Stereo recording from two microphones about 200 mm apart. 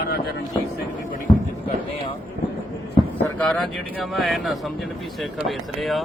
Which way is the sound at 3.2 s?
5° left (ahead or behind).